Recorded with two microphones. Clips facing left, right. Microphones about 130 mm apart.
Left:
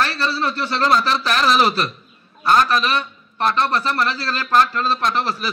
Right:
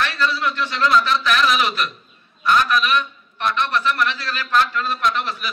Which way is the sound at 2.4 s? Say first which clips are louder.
Left 2 dB; 35° left (ahead or behind).